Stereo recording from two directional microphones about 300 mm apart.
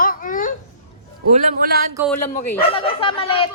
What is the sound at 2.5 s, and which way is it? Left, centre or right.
Speech, centre.